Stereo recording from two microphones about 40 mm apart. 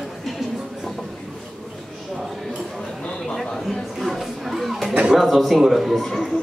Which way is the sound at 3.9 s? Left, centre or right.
Centre.